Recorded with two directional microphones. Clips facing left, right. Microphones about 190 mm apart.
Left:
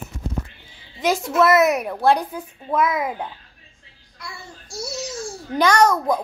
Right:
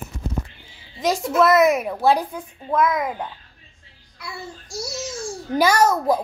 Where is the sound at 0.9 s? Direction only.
Centre (ahead or behind).